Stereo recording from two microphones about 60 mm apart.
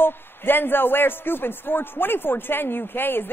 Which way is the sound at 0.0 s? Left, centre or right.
Left.